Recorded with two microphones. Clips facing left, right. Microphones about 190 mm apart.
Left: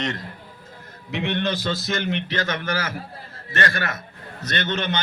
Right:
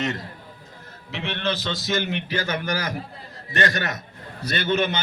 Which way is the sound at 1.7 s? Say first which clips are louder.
Even; centre (ahead or behind).